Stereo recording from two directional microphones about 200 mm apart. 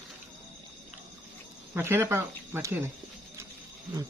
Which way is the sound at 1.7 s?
10° right (ahead or behind).